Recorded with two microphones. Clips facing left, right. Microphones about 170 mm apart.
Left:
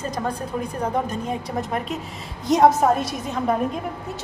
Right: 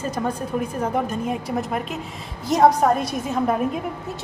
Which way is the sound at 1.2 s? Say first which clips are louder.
Right 2 dB; 5° right (ahead or behind).